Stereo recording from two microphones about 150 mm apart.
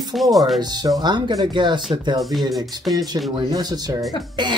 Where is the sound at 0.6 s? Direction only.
30° right (ahead or behind).